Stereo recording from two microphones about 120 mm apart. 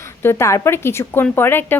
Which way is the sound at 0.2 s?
20° left (ahead or behind).